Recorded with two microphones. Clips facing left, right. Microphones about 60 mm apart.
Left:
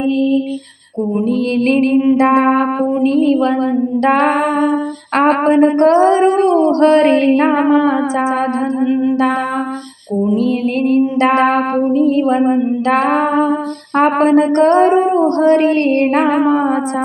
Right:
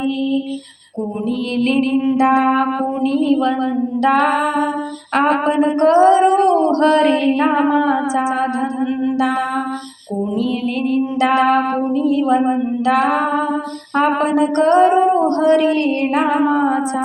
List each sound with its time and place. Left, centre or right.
1.6 s female singing: left
10.8 s female singing: left